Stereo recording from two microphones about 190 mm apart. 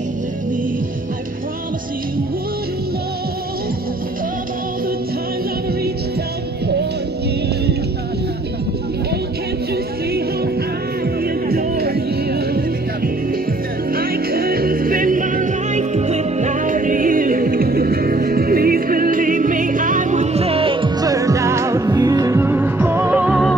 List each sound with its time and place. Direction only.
11.4 s music: 55° right (ahead or behind)
13.9 s music: 50° right (ahead or behind); by 23.5 s 5° right (ahead or behind)